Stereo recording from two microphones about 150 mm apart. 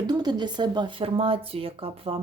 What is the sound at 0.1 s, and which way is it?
Speech, 30° right (ahead or behind).